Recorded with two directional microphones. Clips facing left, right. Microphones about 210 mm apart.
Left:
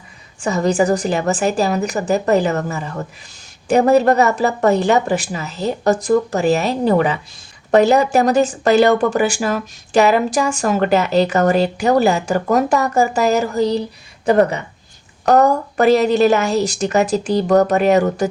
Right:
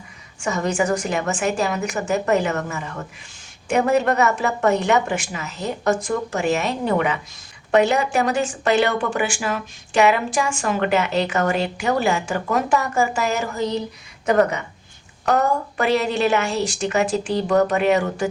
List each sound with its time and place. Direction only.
0.3 s speech: 35° left (ahead or behind)